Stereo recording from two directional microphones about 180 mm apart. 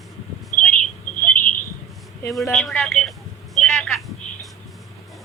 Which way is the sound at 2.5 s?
Centre (ahead or behind).